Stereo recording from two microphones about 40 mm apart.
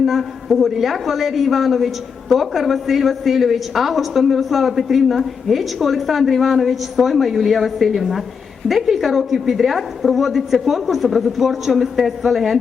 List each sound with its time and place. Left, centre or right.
0.0 s a woman's voice: centre